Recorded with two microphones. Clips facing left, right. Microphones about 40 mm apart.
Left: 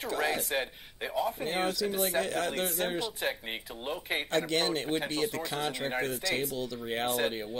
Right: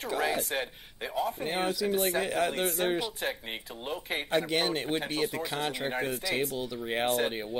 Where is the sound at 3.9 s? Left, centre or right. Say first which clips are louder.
Left 1 dB; centre.